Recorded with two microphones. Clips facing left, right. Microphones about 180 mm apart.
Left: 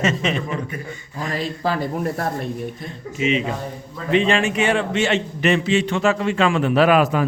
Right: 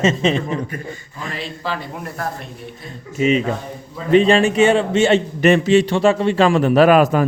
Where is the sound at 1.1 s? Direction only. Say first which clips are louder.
Left 5 dB; 40° left (ahead or behind).